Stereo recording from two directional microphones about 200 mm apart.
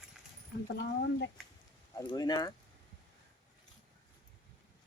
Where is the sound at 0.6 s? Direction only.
60° left (ahead or behind).